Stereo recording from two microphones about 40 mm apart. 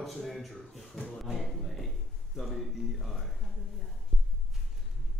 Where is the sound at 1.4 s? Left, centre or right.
Centre.